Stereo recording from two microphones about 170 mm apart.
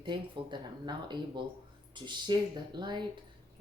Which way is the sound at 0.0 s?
25° right (ahead or behind).